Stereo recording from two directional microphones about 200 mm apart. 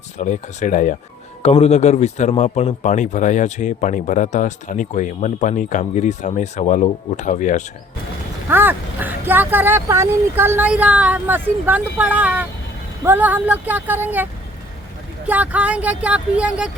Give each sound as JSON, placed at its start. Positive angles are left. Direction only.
{"t": 0.2, "sound": "a man's voice", "side_deg": 40}
{"t": 8.4, "sound": "speech", "side_deg": -10}
{"t": 15.3, "sound": "speech", "side_deg": -5}